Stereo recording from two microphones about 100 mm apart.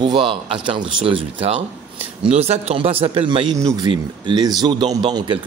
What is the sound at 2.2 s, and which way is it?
Speech, 90° right.